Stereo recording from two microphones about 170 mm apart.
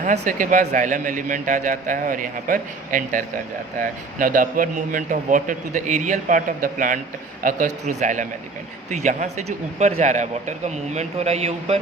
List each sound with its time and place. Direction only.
0.0 s a man's voice: 50° right (ahead or behind)